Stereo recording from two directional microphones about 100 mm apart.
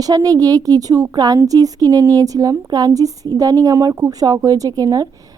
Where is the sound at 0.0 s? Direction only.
40° right (ahead or behind).